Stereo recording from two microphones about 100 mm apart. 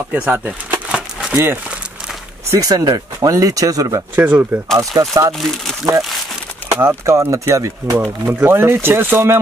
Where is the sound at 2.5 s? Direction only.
35° right (ahead or behind).